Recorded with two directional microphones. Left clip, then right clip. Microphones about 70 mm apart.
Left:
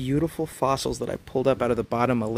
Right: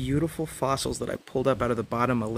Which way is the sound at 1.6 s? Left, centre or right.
Left.